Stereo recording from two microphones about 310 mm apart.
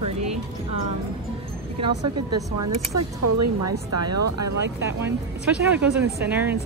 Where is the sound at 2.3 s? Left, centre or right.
Right.